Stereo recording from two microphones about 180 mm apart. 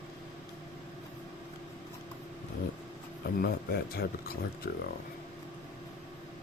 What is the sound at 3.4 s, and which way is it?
Speech, 60° left (ahead or behind).